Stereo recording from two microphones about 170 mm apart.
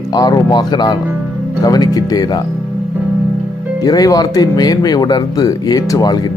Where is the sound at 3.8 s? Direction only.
20° left (ahead or behind).